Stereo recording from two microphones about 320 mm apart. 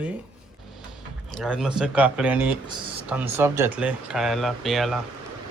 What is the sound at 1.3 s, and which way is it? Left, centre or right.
Speech, centre.